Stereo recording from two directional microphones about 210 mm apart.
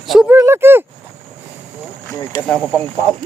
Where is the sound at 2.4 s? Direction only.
Centre (ahead or behind).